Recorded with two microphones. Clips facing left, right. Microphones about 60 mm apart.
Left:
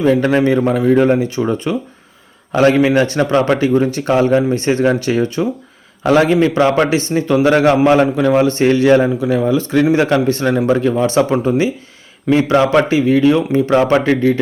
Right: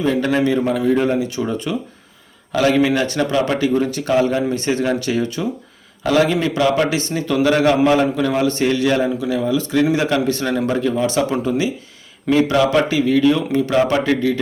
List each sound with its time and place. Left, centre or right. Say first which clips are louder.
0.0 s a man's voice: left 5 dB; left